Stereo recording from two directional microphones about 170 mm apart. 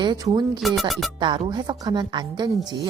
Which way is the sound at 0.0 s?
25° right (ahead or behind).